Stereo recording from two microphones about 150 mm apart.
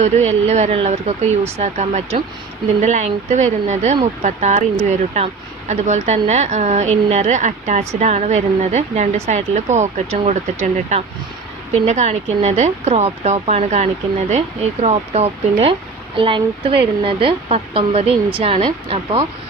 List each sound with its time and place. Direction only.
0.0 s speech: 50° right (ahead or behind)